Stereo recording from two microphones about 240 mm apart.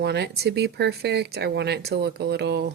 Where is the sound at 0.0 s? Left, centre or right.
Right.